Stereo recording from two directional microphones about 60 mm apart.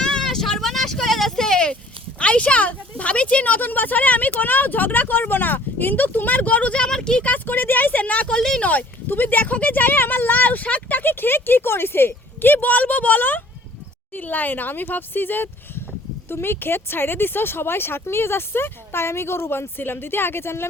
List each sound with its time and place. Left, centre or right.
0.0 s vehicle: centre
0.3 s a sound: centre
2.1 s a woman's voice: centre
7.3 s a woman's voice: left; by 8.6 s centre
8.6 s speech: left